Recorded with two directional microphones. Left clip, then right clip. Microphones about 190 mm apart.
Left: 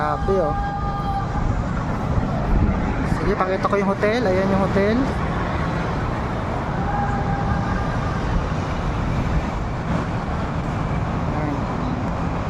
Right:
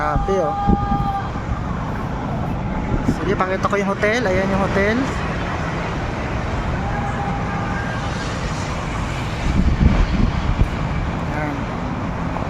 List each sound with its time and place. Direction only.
3.4 s speech: centre (ahead or behind)